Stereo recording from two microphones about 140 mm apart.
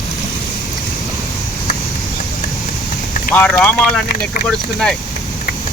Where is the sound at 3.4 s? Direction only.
10° left (ahead or behind).